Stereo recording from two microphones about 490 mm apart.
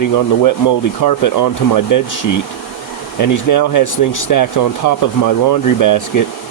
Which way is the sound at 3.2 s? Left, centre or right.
Left.